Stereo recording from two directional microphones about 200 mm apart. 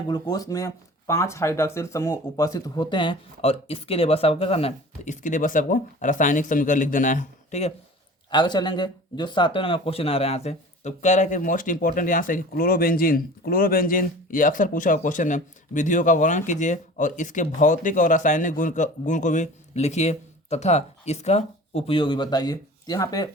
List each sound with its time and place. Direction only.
0.1 s speech: 20° left (ahead or behind); by 7.7 s 35° left (ahead or behind)
8.3 s speech: 20° left (ahead or behind)